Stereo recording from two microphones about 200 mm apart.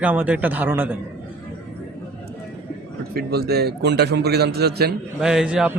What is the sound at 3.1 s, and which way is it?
A man's voice, 50° right (ahead or behind).